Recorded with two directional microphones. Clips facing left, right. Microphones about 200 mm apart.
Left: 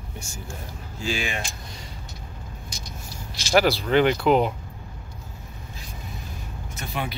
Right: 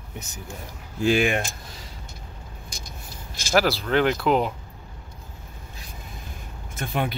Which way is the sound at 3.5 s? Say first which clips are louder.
Left 2 dB; centre (ahead or behind).